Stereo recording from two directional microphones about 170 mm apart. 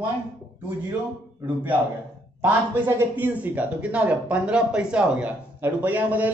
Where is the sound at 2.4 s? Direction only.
10° right (ahead or behind).